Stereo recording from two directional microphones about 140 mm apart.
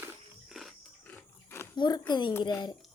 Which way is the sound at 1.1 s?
15° left (ahead or behind).